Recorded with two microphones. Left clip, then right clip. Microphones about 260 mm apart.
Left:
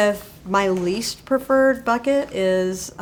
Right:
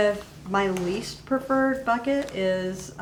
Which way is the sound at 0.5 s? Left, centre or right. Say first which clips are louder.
Left 5 dB; left.